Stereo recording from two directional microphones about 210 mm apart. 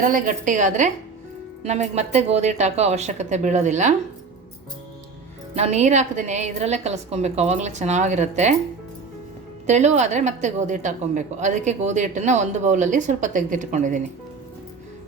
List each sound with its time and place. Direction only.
0.0 s a woman's voice: 40° right (ahead or behind)
5.5 s a woman's voice: 30° right (ahead or behind)
9.6 s a woman's voice: 35° right (ahead or behind)